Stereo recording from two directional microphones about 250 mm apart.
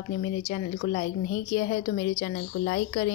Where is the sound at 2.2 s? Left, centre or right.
Left.